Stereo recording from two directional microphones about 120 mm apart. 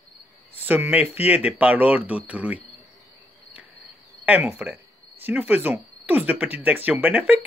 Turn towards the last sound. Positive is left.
turn(degrees=-10)  # may be behind; listen again after turning